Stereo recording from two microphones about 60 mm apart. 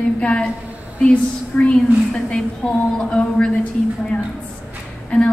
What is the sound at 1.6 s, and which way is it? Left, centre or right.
A woman's voice, centre.